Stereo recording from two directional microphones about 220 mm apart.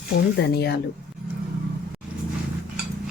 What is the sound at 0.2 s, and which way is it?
Dishes, 45° left (ahead or behind).